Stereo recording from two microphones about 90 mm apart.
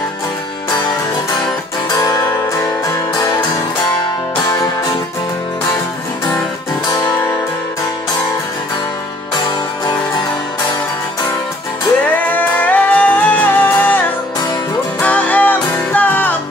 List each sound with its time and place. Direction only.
12.0 s music: 15° left (ahead or behind)